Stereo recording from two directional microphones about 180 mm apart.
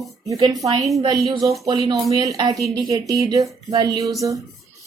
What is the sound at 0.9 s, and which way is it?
Speech, 20° right (ahead or behind).